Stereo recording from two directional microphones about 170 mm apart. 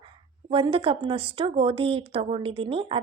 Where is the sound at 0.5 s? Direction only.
30° right (ahead or behind).